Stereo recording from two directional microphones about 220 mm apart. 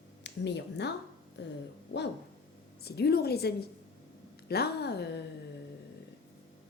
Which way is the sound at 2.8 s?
45° left (ahead or behind).